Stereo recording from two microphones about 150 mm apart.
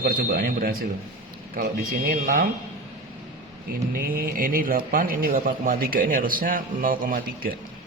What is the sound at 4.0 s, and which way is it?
Speech, 75° right (ahead or behind).